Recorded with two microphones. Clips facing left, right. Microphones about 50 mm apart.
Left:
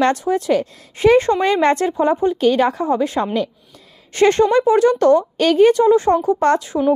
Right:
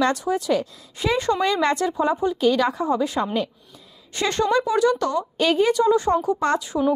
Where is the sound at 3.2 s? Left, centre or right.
Left.